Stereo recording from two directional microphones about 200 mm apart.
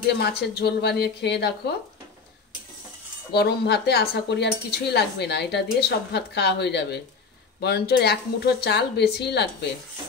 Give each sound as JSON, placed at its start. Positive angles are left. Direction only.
{"t": 0.1, "sound": "speech", "side_deg": 55}
{"t": 3.3, "sound": "speech", "side_deg": 55}